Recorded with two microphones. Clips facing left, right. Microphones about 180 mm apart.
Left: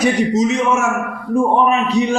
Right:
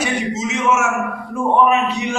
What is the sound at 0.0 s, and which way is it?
Speech, 35° left (ahead or behind).